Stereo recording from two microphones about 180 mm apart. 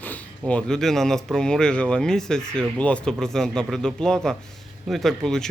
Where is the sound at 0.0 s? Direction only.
10° left (ahead or behind).